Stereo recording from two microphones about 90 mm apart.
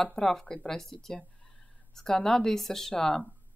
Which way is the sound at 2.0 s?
5° left (ahead or behind).